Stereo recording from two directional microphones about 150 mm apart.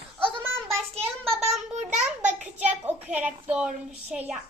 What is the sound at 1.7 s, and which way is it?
Speech, 50° right (ahead or behind).